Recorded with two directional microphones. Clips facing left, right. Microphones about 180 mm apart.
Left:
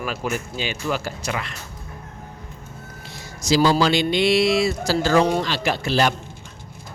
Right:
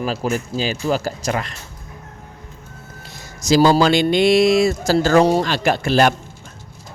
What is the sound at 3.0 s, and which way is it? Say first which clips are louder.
Speech: right 3 dB; 45° right (ahead or behind).